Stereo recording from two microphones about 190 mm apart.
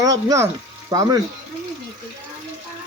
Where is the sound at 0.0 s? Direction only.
20° right (ahead or behind).